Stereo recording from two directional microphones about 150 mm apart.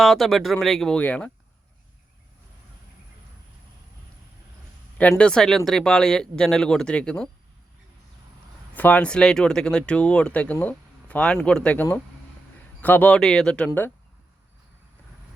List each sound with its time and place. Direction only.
0.0 s speech: centre (ahead or behind)
4.9 s speech: 10° left (ahead or behind)
8.7 s speech: 10° left (ahead or behind)